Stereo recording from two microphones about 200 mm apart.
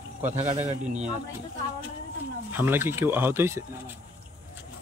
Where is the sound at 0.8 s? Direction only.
5° right (ahead or behind).